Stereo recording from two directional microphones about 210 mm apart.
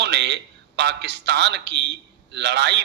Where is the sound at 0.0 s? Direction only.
55° right (ahead or behind).